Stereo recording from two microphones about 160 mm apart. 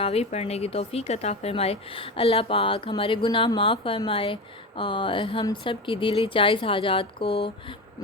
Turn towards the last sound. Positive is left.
turn(degrees=35)  # may be behind; listen again after turning